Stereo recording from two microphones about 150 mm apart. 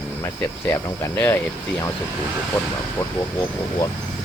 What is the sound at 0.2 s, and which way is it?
Speech, 20° left (ahead or behind).